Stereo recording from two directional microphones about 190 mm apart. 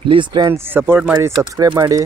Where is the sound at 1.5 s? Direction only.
20° right (ahead or behind).